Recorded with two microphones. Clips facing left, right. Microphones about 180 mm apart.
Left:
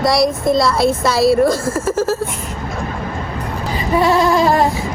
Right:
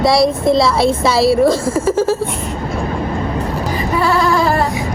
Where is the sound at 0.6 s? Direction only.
Centre (ahead or behind).